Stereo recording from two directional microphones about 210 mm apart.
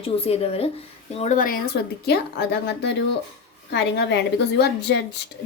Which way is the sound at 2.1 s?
50° left (ahead or behind).